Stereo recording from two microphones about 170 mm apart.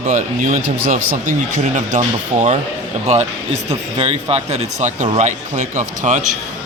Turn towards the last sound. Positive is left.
turn(degrees=-45)  # may be behind; listen again after turning